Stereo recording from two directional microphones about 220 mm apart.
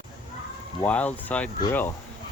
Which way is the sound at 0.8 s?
5° left (ahead or behind).